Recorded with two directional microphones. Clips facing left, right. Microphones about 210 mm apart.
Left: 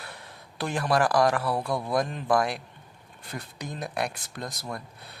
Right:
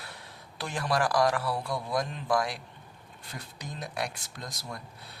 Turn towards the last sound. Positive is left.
turn(degrees=60)  # may be behind; listen again after turning